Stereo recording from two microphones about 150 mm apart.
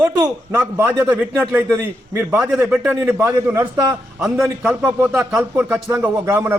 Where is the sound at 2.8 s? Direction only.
15° right (ahead or behind).